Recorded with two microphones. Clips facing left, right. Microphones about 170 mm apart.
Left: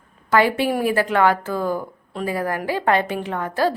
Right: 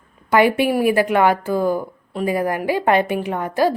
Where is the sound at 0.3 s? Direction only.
15° right (ahead or behind).